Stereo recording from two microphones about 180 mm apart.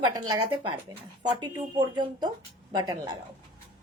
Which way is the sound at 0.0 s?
20° right (ahead or behind).